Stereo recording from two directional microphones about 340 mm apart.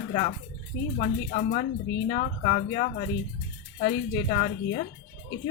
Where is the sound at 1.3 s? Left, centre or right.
Left.